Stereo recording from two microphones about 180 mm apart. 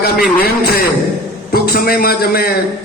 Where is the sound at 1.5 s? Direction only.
55° left (ahead or behind).